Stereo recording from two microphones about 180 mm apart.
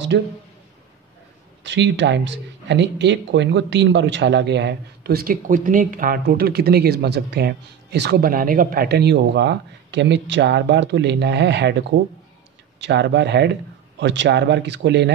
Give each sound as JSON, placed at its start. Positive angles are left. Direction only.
{"t": 0.1, "sound": "speech", "side_deg": -65}
{"t": 1.6, "sound": "speech", "side_deg": -80}
{"t": 12.8, "sound": "speech", "side_deg": -75}